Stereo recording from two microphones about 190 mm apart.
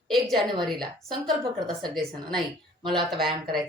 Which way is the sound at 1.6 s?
Centre (ahead or behind).